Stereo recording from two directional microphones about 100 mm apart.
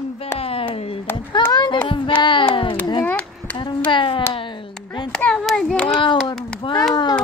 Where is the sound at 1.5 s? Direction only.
50° left (ahead or behind).